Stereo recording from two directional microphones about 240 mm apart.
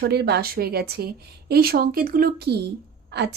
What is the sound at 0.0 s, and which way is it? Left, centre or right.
A woman's voice, right.